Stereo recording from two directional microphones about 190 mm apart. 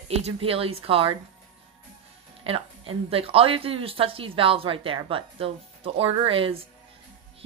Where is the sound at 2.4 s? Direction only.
30° right (ahead or behind).